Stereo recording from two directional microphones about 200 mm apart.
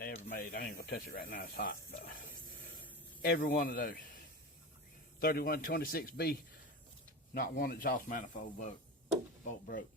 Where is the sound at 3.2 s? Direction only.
50° left (ahead or behind).